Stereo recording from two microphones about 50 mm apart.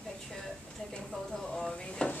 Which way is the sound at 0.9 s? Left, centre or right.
Centre.